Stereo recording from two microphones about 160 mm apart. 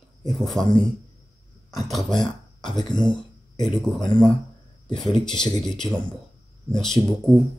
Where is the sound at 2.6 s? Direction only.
25° left (ahead or behind).